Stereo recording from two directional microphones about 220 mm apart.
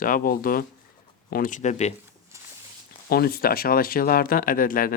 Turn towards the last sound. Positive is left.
turn(degrees=40)  # may be behind; listen again after turning